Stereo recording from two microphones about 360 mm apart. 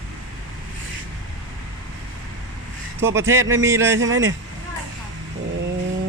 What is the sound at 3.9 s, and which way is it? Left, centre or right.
Speech, right.